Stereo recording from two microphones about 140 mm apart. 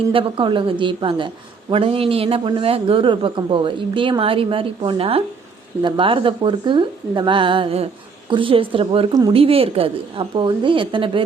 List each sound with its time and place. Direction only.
0.1 s a man's voice: 40° right (ahead or behind)